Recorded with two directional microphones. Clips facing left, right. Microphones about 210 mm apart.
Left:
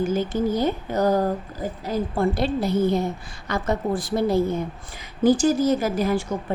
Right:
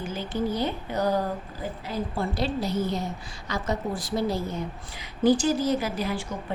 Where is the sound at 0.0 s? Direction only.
45° left (ahead or behind).